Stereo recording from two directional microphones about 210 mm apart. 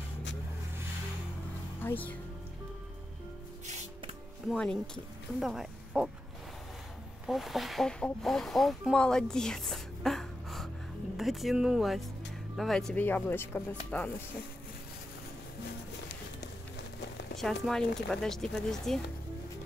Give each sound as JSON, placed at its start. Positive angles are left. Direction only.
{"t": 1.8, "sound": "speech", "side_deg": 10}
{"t": 3.6, "sound": "music", "side_deg": -35}
{"t": 4.5, "sound": "speech", "side_deg": 5}
{"t": 7.2, "sound": "speech", "side_deg": 0}
{"t": 17.4, "sound": "speech", "side_deg": 0}